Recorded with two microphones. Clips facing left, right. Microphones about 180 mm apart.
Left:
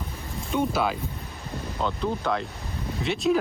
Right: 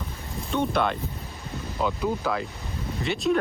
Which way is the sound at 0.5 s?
5° left (ahead or behind).